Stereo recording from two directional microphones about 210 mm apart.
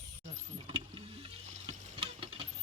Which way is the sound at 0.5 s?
25° right (ahead or behind).